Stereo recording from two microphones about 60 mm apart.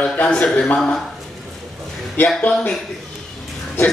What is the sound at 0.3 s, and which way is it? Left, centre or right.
Speech, centre.